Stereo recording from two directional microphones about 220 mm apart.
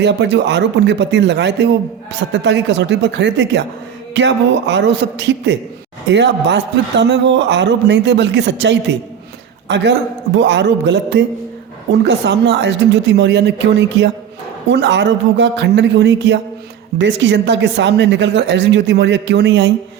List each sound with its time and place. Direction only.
0.0 s a man's voice: 50° right (ahead or behind)